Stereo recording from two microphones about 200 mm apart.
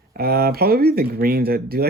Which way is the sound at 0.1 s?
50° right (ahead or behind).